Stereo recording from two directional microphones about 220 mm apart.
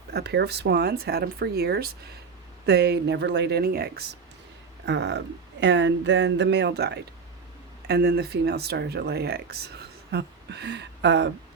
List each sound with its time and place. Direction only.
0.1 s speech: 50° right (ahead or behind)